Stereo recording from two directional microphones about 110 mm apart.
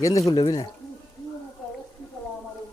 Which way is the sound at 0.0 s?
30° left (ahead or behind).